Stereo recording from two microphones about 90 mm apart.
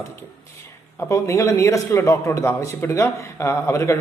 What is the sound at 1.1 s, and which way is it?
A man's voice, 35° left (ahead or behind).